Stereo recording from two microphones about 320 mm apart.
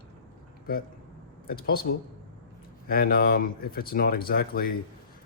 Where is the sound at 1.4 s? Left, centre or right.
Left.